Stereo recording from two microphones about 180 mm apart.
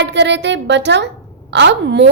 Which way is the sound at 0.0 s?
75° right (ahead or behind).